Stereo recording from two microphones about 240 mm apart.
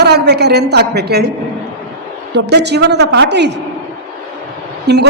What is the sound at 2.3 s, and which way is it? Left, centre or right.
A woman's voice, right.